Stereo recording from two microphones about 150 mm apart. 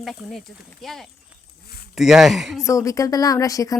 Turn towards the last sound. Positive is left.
turn(degrees=25)  # may be behind; listen again after turning